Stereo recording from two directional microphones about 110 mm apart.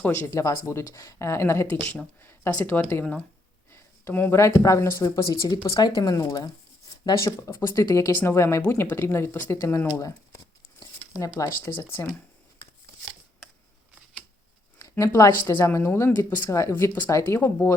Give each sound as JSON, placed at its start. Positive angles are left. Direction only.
{"t": 0.0, "sound": "speech", "side_deg": 20}
{"t": 1.8, "sound": "speech", "side_deg": 10}
{"t": 11.2, "sound": "speech", "side_deg": 30}
{"t": 11.8, "sound": "speech", "side_deg": 15}
{"t": 14.8, "sound": "a sound", "side_deg": 30}
{"t": 15.1, "sound": "speech", "side_deg": 30}